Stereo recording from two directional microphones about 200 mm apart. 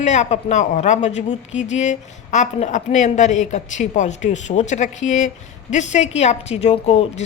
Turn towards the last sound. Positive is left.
turn(degrees=30)  # may be behind; listen again after turning